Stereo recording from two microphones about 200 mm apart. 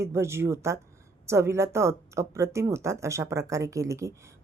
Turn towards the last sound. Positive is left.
turn(degrees=-15)  # may be behind; listen again after turning